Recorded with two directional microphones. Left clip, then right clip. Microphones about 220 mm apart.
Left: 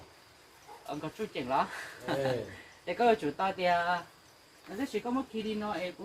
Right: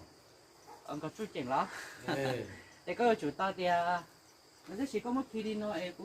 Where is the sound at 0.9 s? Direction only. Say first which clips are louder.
Left 3 dB; centre (ahead or behind).